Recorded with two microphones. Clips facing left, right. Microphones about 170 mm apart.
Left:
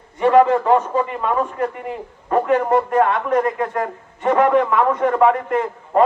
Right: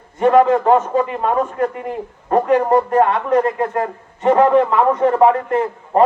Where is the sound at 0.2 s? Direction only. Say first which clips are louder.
Right 1 dB; 45° right (ahead or behind).